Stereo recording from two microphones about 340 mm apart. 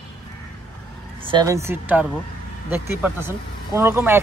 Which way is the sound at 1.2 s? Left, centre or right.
Centre.